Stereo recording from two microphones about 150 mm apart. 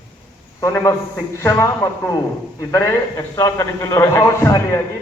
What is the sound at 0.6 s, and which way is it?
A man's voice, 20° left (ahead or behind).